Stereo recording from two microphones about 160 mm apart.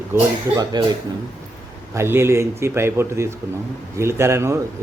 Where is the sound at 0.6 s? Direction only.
25° right (ahead or behind).